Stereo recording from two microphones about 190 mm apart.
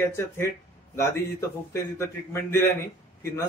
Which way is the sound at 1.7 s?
15° left (ahead or behind).